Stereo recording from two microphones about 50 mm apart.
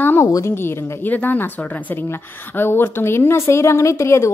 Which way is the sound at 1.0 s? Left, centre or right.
Left.